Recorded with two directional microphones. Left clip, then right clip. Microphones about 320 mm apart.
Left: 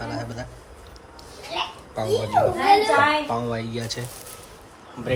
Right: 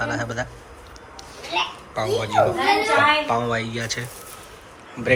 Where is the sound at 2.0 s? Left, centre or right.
Centre.